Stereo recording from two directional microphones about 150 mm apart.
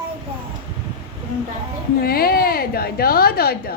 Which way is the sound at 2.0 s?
85° left.